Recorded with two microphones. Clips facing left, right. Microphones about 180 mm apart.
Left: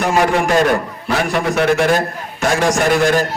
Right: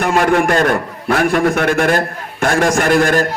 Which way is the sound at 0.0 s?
55° right (ahead or behind).